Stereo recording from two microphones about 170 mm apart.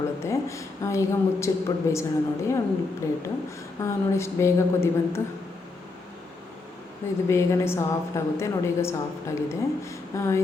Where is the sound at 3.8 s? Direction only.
15° left (ahead or behind).